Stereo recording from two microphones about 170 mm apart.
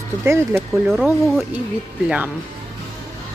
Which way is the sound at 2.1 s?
10° right (ahead or behind).